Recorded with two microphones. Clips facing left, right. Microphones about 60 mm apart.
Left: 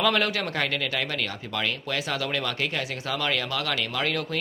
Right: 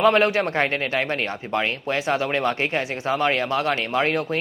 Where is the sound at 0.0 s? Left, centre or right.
Right.